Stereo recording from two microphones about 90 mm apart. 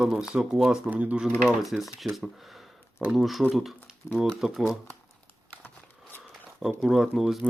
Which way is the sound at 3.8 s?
5° right (ahead or behind).